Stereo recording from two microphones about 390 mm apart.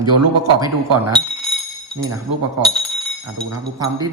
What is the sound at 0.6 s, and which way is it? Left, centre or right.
Speech, centre.